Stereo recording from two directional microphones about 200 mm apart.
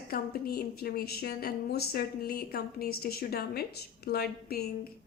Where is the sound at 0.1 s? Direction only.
50° left (ahead or behind).